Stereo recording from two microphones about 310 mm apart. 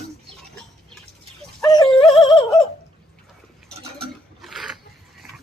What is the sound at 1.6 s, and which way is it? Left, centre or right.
Music, centre.